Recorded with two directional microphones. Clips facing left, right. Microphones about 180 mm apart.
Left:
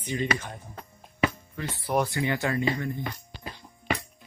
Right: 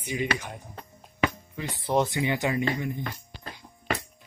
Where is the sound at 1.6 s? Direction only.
20° right (ahead or behind).